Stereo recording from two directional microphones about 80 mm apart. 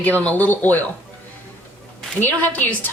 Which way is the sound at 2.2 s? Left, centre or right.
Left.